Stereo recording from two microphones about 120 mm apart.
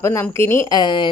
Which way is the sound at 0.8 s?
40° left (ahead or behind).